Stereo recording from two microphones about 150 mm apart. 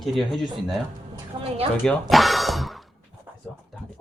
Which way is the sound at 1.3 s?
30° right (ahead or behind).